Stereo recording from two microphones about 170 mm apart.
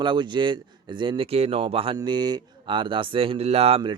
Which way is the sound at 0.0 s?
30° right (ahead or behind).